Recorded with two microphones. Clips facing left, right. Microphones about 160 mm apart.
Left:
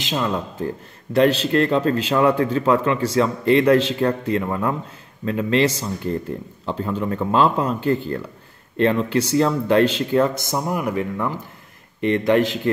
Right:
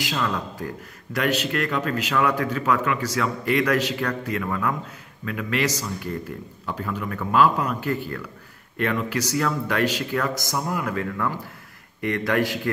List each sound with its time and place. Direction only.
0.0 s speech: 20° left (ahead or behind)